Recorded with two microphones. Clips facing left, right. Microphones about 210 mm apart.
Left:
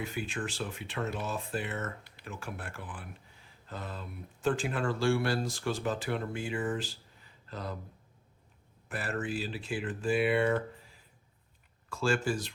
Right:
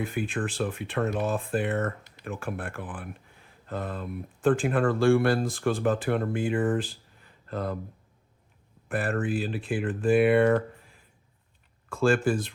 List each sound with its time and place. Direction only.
0.0 s speech: 55° right (ahead or behind)
8.9 s speech: 55° right (ahead or behind)